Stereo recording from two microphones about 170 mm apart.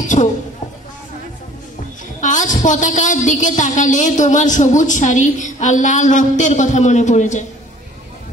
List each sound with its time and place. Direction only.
0.0 s speech: 45° left (ahead or behind)
2.1 s a woman's voice: 45° left (ahead or behind)